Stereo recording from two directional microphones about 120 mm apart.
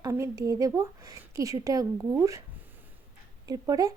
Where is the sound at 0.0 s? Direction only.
25° right (ahead or behind).